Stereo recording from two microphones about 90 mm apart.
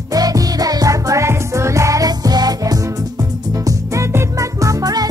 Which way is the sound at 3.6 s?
35° right (ahead or behind).